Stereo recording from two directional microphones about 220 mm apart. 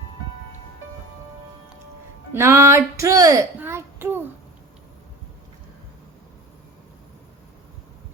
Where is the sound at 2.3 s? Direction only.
10° right (ahead or behind).